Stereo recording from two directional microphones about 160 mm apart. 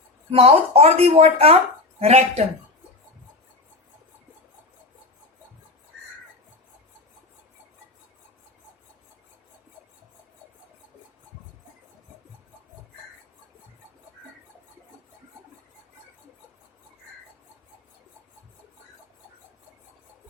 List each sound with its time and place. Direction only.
0.3 s a woman's voice: 40° right (ahead or behind)